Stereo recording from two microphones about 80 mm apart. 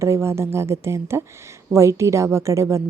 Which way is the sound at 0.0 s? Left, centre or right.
Right.